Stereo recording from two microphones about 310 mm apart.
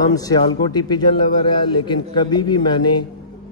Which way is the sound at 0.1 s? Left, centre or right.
Centre.